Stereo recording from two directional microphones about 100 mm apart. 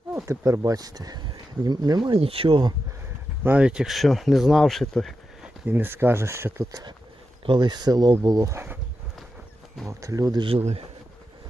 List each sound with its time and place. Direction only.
0.3 s speech: 30° right (ahead or behind); by 2.1 s 45° right (ahead or behind)
2.1 s speech: 70° right (ahead or behind)
3.4 s speech: 10° right (ahead or behind)
5.6 s speech: 20° right (ahead or behind)
6.7 s speech: 35° right (ahead or behind)
7.4 s speech: 50° right (ahead or behind); by 8.6 s 30° right (ahead or behind)
9.8 s speech: 30° right (ahead or behind)
10.4 s speech: 80° right